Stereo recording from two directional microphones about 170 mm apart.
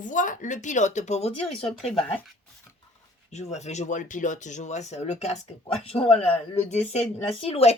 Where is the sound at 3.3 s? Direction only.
40° left (ahead or behind).